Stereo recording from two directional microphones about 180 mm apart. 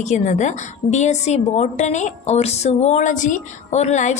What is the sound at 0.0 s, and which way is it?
A woman's voice, 40° left (ahead or behind).